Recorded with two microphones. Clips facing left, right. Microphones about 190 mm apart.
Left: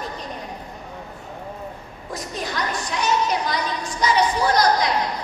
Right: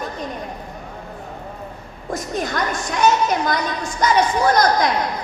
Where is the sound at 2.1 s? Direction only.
50° right (ahead or behind).